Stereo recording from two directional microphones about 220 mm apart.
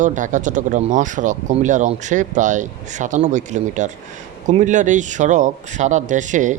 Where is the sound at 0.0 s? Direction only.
35° right (ahead or behind).